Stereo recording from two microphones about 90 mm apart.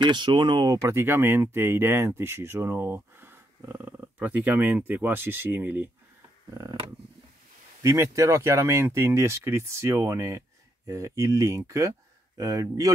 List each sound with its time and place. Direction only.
0.0 s speech: 60° right (ahead or behind)
0.8 s speech: 25° right (ahead or behind)
7.8 s speech: 35° right (ahead or behind)